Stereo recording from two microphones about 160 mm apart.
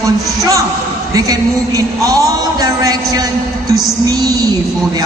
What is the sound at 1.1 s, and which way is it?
Speech, 20° right (ahead or behind).